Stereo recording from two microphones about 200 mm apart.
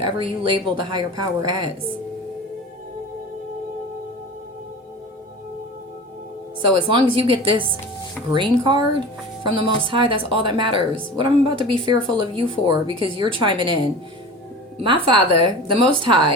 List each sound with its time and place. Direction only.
0.0 s speech: 25° right (ahead or behind)
6.7 s speech: 25° right (ahead or behind)
14.8 s speech: 25° right (ahead or behind)